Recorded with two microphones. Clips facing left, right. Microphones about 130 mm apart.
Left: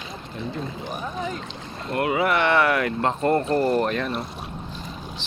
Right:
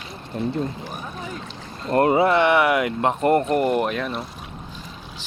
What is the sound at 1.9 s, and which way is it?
Speech, 35° right (ahead or behind).